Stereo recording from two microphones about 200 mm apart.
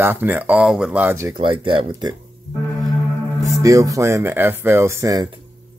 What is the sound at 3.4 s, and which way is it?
Speech, 15° right (ahead or behind).